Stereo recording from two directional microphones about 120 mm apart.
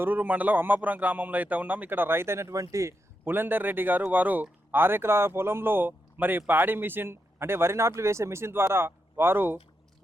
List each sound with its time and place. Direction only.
0.0 s speech: 15° right (ahead or behind)